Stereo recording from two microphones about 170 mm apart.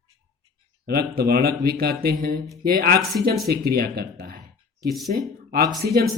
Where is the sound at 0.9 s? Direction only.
65° right (ahead or behind).